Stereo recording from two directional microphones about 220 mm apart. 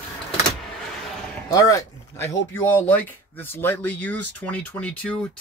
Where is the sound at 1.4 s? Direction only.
15° left (ahead or behind).